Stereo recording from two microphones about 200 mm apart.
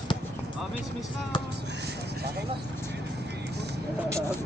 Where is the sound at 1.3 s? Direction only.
25° left (ahead or behind).